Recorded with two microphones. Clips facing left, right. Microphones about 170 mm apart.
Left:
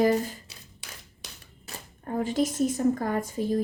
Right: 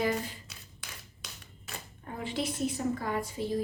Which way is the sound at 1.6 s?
45° left (ahead or behind).